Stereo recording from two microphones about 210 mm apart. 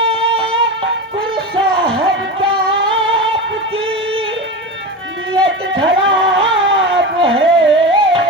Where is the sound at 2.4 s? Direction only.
25° right (ahead or behind).